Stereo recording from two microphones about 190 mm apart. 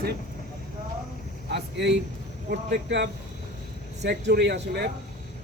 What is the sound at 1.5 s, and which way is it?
Speech, 65° right (ahead or behind).